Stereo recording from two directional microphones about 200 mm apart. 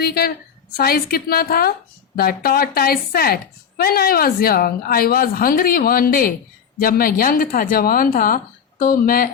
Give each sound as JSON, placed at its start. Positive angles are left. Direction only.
{"t": 0.0, "sound": "a woman's voice", "side_deg": 50}